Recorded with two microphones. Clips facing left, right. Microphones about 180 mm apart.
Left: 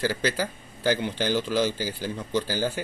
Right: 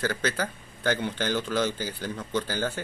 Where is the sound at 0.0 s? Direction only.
10° left (ahead or behind).